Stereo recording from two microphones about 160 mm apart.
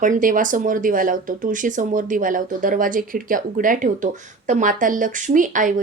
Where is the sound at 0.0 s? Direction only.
55° right (ahead or behind).